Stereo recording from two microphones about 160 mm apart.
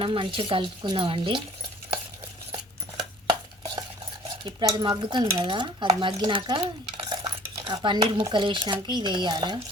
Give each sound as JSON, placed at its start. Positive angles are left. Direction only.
{"t": 0.0, "sound": "speech", "side_deg": -35}
{"t": 3.2, "sound": "chopping", "side_deg": -25}
{"t": 4.4, "sound": "speech", "side_deg": -25}